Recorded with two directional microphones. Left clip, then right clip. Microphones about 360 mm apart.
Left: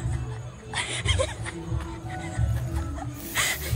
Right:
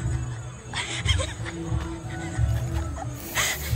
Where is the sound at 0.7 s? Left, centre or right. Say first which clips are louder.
Even; centre.